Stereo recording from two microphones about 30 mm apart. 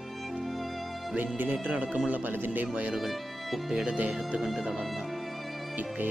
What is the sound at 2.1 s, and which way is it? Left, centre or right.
Speech, right.